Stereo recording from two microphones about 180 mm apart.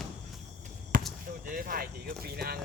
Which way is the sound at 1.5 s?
55° right (ahead or behind).